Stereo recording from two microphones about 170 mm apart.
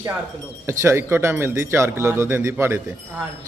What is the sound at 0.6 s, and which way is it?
A man's voice, 15° right (ahead or behind).